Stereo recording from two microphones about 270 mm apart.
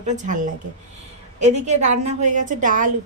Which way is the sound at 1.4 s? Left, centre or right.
Right.